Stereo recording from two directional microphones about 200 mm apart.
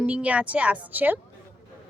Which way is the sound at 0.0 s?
5° right (ahead or behind).